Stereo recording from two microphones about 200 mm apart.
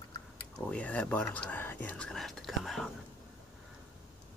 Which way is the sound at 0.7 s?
5° left (ahead or behind).